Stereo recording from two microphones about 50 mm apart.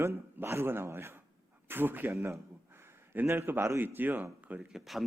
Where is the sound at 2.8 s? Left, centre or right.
Right.